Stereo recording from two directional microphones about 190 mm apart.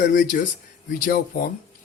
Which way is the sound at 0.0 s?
45° left (ahead or behind).